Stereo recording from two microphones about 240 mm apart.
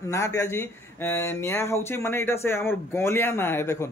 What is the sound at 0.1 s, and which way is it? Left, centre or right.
A man's voice, centre.